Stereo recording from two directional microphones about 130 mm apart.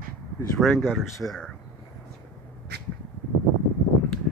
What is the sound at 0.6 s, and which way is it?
Speech, centre (ahead or behind).